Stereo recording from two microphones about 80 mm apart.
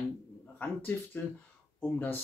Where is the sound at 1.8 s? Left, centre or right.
Left.